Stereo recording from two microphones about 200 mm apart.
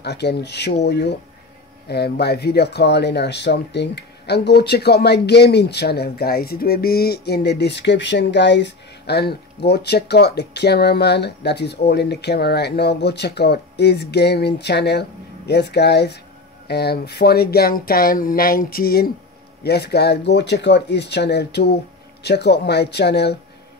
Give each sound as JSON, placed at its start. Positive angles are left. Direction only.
{"t": 0.0, "sound": "speech", "side_deg": 55}